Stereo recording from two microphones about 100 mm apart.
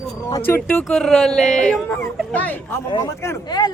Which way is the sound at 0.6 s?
5° left (ahead or behind).